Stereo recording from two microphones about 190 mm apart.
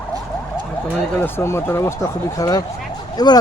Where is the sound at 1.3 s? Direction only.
15° left (ahead or behind).